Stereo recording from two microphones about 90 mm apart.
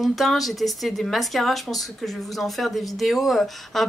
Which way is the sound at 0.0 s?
Centre (ahead or behind).